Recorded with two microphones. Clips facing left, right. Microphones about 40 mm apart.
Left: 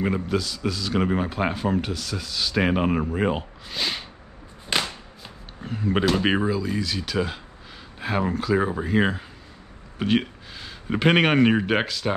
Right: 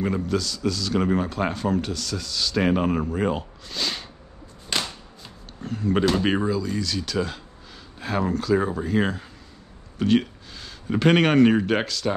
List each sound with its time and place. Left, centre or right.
0.0 s speech: centre